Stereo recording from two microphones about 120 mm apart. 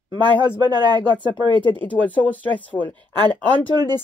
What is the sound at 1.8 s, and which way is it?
Speech, 15° left (ahead or behind).